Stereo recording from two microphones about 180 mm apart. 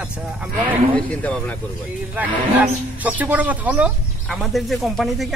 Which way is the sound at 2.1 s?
10° right (ahead or behind).